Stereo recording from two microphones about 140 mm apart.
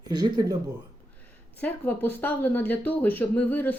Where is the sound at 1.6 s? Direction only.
15° left (ahead or behind).